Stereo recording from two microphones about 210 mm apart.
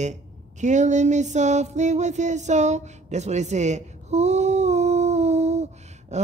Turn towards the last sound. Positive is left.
turn(degrees=-30)  # may be behind; listen again after turning